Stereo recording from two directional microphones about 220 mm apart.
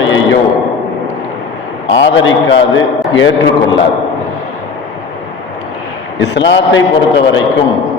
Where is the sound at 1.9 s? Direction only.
55° left (ahead or behind).